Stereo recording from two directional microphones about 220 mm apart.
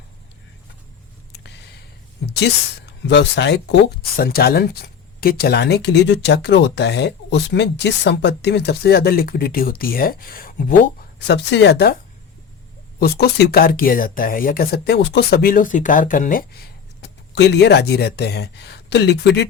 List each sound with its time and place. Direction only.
2.2 s speech: 50° left (ahead or behind)
11.3 s speech: 50° left (ahead or behind)
13.0 s speech: 50° left (ahead or behind)
17.0 s speech: 50° left (ahead or behind)